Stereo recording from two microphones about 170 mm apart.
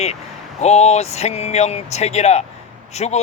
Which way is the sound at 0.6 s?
40° left (ahead or behind).